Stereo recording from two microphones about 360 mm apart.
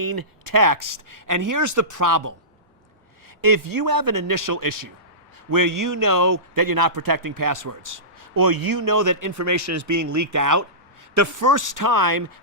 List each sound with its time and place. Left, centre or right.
0.0 s a man's voice: right
3.4 s a man's voice: right
8.2 s a man's voice: right